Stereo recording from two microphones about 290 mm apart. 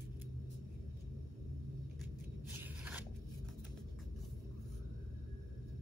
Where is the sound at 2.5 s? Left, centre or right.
Centre.